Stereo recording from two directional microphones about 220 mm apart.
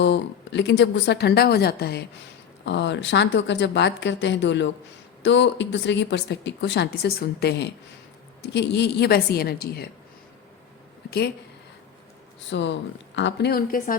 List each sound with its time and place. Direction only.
0.0 s speech: 55° left (ahead or behind)
12.5 s speech: 55° left (ahead or behind)